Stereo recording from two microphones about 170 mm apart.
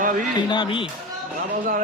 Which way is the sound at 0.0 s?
50° right (ahead or behind).